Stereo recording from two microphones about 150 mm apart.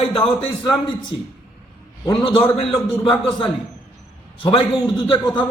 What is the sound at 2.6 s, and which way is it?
Speech, 40° left (ahead or behind).